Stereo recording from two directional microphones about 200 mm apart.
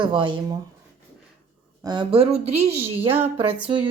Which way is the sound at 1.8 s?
25° right (ahead or behind).